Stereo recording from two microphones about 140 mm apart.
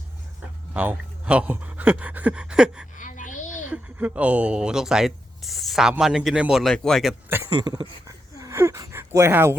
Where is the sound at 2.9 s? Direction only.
65° left (ahead or behind).